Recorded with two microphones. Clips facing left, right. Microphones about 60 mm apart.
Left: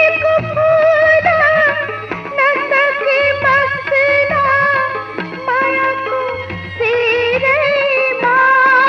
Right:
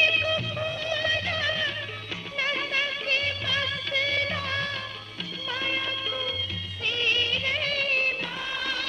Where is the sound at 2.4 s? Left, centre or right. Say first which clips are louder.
Left 16 dB; left.